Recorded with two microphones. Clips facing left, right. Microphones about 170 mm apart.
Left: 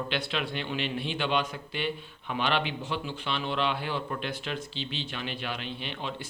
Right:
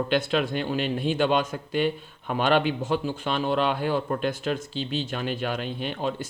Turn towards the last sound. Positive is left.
turn(degrees=-45)  # may be behind; listen again after turning